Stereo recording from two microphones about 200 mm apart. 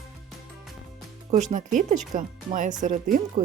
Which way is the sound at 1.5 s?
40° right (ahead or behind).